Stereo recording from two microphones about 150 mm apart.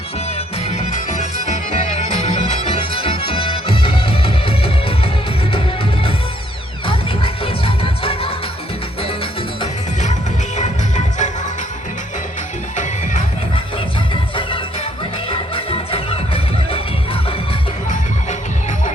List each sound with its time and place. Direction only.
0.7 s music: 55° left (ahead or behind)
2.6 s music: 35° left (ahead or behind)
6.8 s music: 35° left (ahead or behind)
10.6 s music: 55° left (ahead or behind)
12.7 s music: 55° left (ahead or behind)
14.1 s music: 35° left (ahead or behind)